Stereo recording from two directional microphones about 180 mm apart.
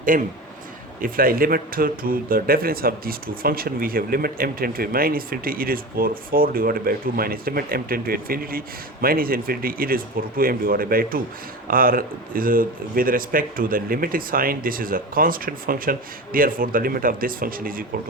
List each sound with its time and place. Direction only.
0.1 s speech: 50° right (ahead or behind)